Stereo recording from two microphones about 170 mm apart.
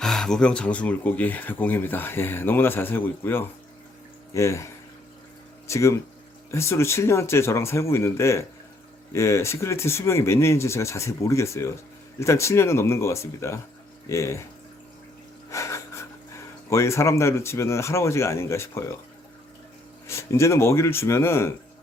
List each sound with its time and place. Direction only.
0.0 s speech: 5° left (ahead or behind)
15.4 s speech: 15° left (ahead or behind)
20.1 s speech: 15° left (ahead or behind)